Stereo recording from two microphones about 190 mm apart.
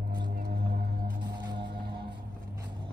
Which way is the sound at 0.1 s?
55° right (ahead or behind).